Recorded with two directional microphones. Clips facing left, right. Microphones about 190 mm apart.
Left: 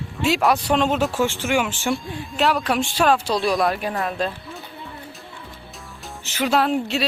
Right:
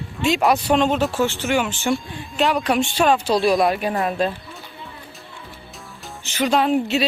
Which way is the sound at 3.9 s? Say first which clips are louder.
Right 3 dB; 20° right (ahead or behind).